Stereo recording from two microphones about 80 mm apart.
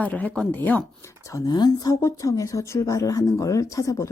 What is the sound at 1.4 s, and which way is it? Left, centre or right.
Speech, left.